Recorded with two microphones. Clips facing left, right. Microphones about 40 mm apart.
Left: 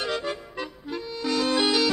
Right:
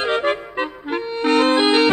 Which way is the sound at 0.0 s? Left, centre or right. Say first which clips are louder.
Right 9 dB; right.